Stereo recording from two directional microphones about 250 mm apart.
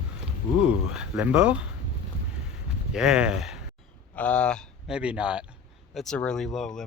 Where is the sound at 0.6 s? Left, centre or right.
Centre.